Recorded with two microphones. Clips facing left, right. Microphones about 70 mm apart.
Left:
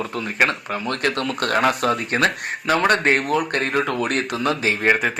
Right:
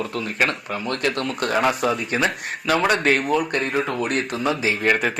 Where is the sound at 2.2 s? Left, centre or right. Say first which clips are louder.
Left 1 dB; centre.